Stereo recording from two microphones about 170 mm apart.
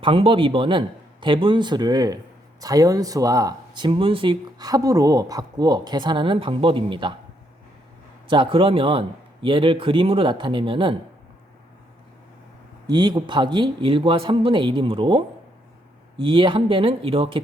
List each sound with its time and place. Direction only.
0.0 s speech: 30° right (ahead or behind)
8.3 s a man's voice: 30° right (ahead or behind)
12.9 s a man's voice: 25° right (ahead or behind)